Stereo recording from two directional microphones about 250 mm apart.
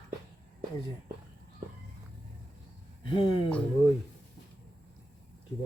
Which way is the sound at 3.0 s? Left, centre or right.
Centre.